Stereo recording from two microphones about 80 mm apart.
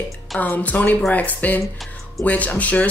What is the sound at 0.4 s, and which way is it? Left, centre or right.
Speech, centre.